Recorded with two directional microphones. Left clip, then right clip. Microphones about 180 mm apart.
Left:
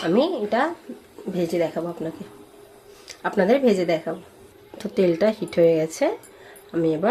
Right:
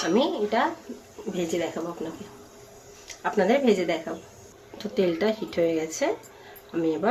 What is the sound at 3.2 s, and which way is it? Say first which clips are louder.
Speech: left 3 dB; 45° left (ahead or behind).